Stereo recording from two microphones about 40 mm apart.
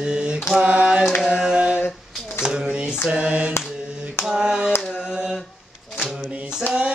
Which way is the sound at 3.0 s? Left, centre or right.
Right.